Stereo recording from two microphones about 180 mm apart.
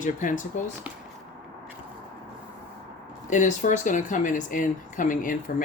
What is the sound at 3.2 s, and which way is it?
Speech, 45° left (ahead or behind).